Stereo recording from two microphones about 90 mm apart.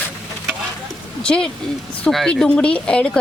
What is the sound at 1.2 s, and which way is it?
Speech, 10° left (ahead or behind).